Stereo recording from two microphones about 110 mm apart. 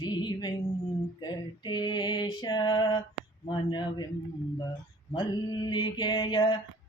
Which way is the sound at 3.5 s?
45° left (ahead or behind).